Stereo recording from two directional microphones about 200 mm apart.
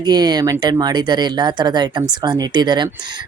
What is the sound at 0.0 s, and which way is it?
Speech, 20° right (ahead or behind).